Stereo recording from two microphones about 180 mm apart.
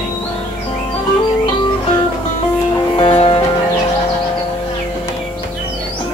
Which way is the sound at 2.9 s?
30° left (ahead or behind).